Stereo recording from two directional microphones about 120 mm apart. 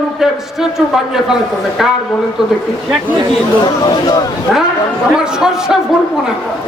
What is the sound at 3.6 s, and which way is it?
Speech, 35° left (ahead or behind).